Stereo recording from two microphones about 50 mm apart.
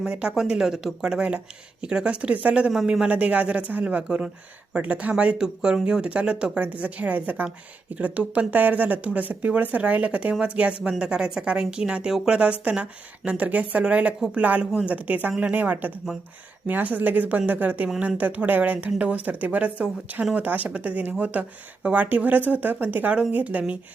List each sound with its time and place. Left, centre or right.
0.0 s a woman's voice: centre
1.0 s a woman's voice: centre
5.1 s speech: right
6.6 s a woman's voice: right